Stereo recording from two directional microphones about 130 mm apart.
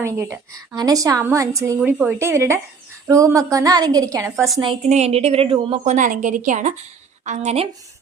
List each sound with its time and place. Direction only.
0.0 s a woman's voice: 20° right (ahead or behind)
1.8 s speech: 10° right (ahead or behind)
2.1 s a woman's voice: 20° right (ahead or behind)
4.9 s a woman's voice: 55° right (ahead or behind)
5.8 s speech: 75° right (ahead or behind)
7.3 s speech: 55° right (ahead or behind)